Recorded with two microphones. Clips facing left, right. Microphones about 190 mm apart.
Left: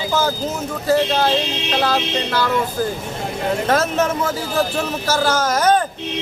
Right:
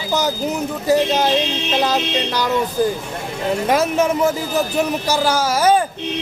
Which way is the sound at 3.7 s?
10° right (ahead or behind).